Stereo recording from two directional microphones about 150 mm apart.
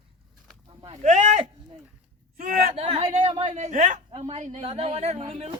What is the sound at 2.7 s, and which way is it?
A man's voice, 40° right (ahead or behind).